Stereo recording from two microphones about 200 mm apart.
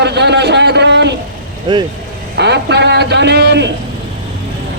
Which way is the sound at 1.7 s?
25° right (ahead or behind).